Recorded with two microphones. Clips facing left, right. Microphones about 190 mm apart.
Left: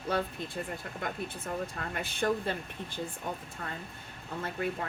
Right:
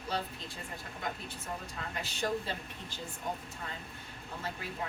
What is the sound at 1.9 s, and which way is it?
A woman's voice, 55° left (ahead or behind).